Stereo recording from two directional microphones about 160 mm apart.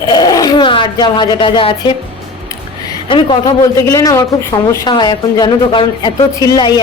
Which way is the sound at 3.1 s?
30° left (ahead or behind).